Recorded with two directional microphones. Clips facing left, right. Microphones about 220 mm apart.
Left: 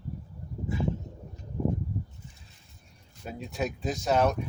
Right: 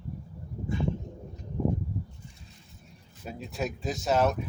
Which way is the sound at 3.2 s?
Centre (ahead or behind).